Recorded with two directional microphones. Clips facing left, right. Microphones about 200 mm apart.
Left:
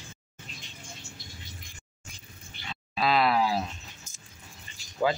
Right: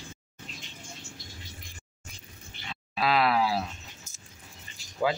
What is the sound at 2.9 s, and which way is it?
Speech, 5° right (ahead or behind).